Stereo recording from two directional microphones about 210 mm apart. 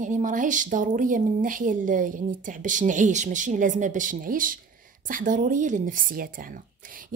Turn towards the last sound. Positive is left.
turn(degrees=-40)  # may be behind; listen again after turning